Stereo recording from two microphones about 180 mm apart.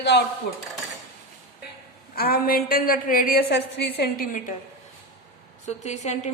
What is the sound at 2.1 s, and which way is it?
A woman's voice, 55° left (ahead or behind).